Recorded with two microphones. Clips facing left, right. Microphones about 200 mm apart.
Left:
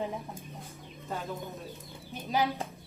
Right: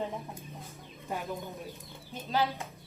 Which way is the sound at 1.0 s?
15° right (ahead or behind).